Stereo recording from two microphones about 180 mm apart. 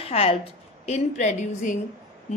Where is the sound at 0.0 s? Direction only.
35° left (ahead or behind).